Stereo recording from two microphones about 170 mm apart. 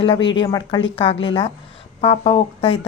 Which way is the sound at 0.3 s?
25° left (ahead or behind).